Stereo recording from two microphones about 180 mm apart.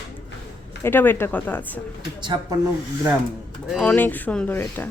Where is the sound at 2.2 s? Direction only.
25° right (ahead or behind).